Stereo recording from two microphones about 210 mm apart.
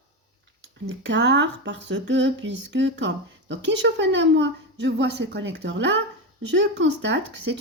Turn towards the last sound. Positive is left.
turn(degrees=-60)  # may be behind; listen again after turning